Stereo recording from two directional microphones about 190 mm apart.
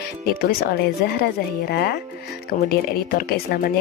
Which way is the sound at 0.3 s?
50° left (ahead or behind).